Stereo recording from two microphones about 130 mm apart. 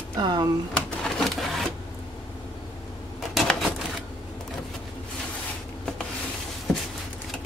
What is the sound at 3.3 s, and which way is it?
Typewriter, centre (ahead or behind).